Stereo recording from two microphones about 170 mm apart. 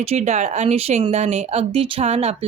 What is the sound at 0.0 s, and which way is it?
A woman's voice, 40° right (ahead or behind).